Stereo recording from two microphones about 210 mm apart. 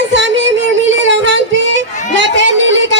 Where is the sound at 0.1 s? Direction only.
60° right (ahead or behind).